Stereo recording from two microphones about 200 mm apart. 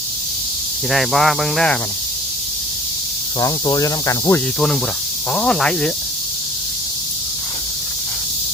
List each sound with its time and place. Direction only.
0.9 s speech: centre (ahead or behind)
3.4 s speech: 20° left (ahead or behind)
5.3 s speech: 5° left (ahead or behind)